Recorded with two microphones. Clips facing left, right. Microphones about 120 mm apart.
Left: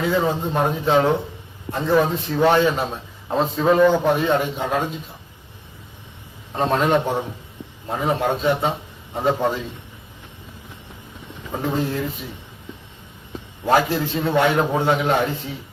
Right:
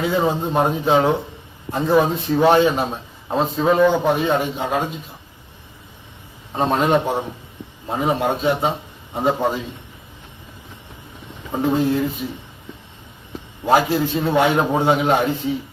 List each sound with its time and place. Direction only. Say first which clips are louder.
0.0 s a man's voice: right 1 dB; 15° right (ahead or behind)
6.6 s a man's voice: right 1 dB; 10° right (ahead or behind)
11.5 s a man's voice: right 5 dB; 5° right (ahead or behind)
13.7 s a man's voice: right 2 dB; 10° right (ahead or behind)